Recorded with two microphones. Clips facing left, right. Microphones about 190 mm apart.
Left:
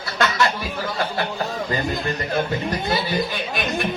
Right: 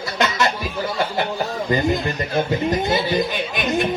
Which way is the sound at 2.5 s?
20° right (ahead or behind).